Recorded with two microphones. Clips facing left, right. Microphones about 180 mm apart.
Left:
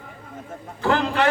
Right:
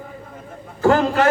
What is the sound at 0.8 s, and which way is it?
Speech, 40° right (ahead or behind).